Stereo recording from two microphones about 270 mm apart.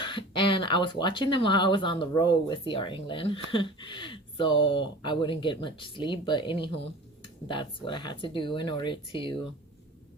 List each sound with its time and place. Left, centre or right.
0.0 s speech: centre